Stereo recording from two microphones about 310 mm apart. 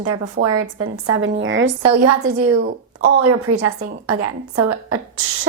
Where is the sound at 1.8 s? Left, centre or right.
Right.